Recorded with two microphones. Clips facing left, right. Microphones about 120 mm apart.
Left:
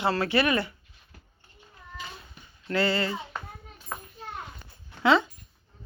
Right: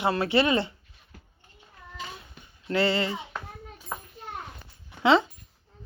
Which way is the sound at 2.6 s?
25° right (ahead or behind).